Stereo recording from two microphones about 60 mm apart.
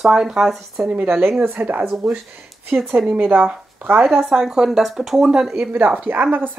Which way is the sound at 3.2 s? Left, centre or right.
Right.